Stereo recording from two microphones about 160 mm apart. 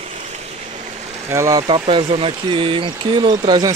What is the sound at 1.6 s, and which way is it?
Speech, 35° right (ahead or behind).